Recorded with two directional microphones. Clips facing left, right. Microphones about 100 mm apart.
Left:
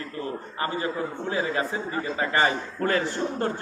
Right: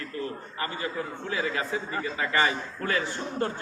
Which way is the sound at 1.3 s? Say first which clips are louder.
Left 2 dB; 30° left (ahead or behind).